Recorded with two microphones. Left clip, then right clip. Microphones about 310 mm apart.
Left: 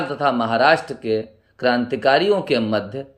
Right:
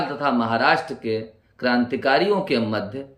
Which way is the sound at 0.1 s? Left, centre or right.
Centre.